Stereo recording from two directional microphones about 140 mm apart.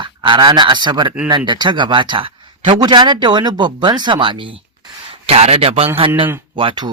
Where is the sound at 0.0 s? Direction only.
35° right (ahead or behind).